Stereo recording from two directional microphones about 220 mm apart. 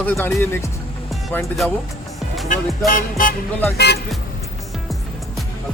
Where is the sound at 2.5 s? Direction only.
40° left (ahead or behind).